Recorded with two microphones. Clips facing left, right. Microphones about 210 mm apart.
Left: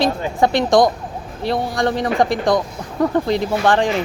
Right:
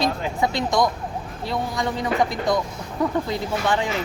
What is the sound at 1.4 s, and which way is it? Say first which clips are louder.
Speech: left 7 dB; 80° left.